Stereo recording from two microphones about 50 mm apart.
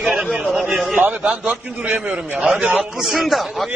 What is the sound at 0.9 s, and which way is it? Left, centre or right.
Speech, right.